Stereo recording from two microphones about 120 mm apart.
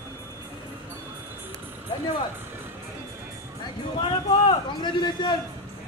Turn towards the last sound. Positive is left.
turn(degrees=40)  # may be behind; listen again after turning